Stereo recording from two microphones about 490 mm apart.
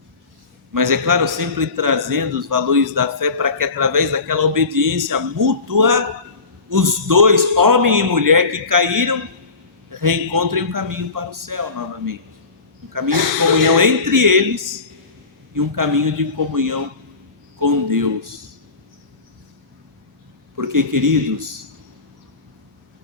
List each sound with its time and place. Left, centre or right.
0.7 s a man's voice: right
12.9 s a man's voice: right
20.6 s a man's voice: right